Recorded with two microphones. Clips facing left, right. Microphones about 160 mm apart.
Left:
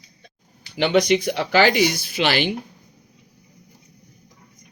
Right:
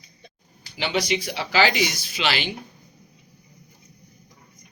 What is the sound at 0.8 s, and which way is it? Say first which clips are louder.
Speech: left 7 dB; 55° left (ahead or behind).